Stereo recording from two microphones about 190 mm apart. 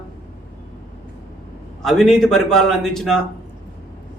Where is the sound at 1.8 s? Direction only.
Centre (ahead or behind).